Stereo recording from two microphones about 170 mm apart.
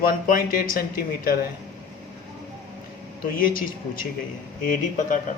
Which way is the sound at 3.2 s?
55° left (ahead or behind).